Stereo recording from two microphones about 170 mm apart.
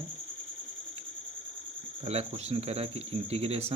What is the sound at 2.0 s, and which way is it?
Speech, 35° right (ahead or behind).